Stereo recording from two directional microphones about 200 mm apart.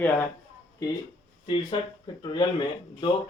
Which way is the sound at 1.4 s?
25° left (ahead or behind).